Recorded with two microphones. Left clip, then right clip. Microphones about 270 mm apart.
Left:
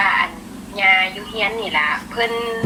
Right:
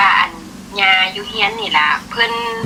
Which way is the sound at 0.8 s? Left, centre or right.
Right.